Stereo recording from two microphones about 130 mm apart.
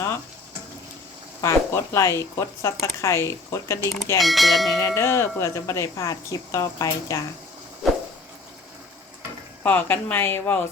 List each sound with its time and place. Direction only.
1.4 s speech: 20° left (ahead or behind)
4.2 s speech: centre (ahead or behind)
4.8 s speech: 20° left (ahead or behind)
9.6 s a woman's voice: 15° left (ahead or behind)